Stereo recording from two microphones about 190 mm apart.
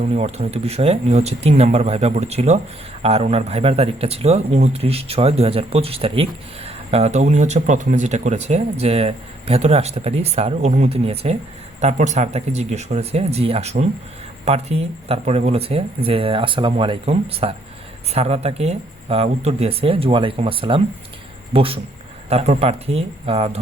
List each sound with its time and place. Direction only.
0.0 s speech: 35° right (ahead or behind)